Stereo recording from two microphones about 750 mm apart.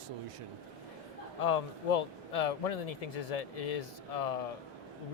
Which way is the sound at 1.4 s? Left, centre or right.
Left.